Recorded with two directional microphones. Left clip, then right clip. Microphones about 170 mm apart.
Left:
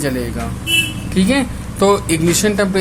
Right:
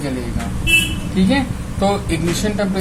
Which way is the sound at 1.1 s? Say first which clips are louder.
Left 2 dB; 45° left (ahead or behind).